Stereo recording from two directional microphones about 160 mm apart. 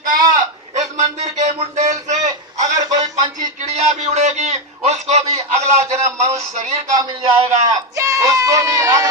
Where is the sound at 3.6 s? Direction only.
40° right (ahead or behind).